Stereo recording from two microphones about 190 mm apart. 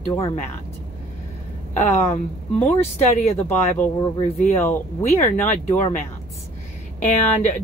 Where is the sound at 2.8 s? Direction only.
35° left (ahead or behind).